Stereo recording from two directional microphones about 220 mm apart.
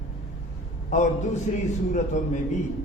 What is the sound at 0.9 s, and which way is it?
Speech, 35° left (ahead or behind).